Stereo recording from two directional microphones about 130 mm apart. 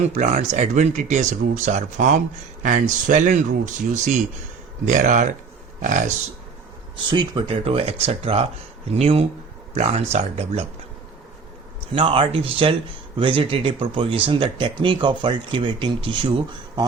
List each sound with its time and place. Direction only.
0.0 s speech: 60° right (ahead or behind)
4.9 s speech: 70° right (ahead or behind)
6.9 s speech: 40° right (ahead or behind)
11.9 s speech: 45° right (ahead or behind)